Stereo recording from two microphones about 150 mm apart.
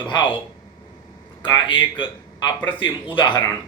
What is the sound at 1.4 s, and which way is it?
Speech, 35° left (ahead or behind).